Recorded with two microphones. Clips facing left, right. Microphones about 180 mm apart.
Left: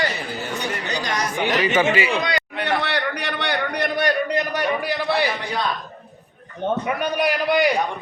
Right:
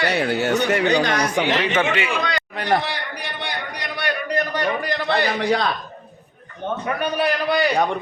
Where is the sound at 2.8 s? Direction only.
70° left (ahead or behind); by 4.1 s 50° left (ahead or behind).